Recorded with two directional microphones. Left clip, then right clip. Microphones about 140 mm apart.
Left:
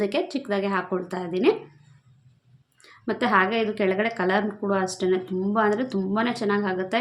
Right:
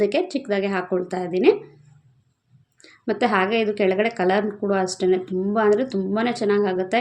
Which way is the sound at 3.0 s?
15° right (ahead or behind).